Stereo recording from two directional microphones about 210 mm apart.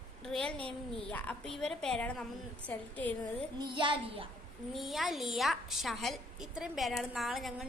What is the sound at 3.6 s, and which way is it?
Speech, 20° right (ahead or behind).